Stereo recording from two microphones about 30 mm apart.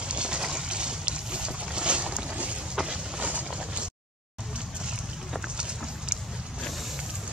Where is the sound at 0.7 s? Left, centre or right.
Right.